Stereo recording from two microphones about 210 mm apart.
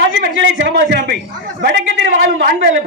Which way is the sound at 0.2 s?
60° right (ahead or behind).